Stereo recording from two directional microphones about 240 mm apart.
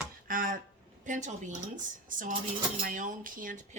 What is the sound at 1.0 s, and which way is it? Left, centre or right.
Speech, right.